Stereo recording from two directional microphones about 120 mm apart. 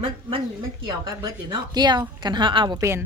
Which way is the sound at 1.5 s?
35° right (ahead or behind).